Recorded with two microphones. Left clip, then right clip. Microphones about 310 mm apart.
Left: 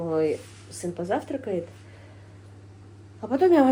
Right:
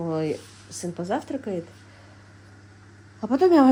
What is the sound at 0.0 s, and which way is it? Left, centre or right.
Speech, right.